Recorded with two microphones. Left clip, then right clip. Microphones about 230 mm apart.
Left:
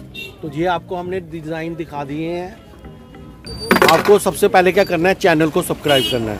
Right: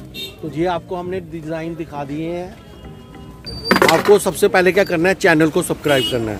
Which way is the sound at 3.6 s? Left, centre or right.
Left.